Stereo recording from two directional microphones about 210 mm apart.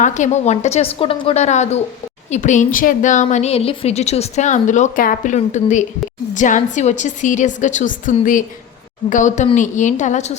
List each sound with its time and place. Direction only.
0.0 s a woman's voice: 35° left (ahead or behind)